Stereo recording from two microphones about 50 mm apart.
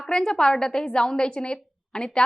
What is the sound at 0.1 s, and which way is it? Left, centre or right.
A woman's voice, centre.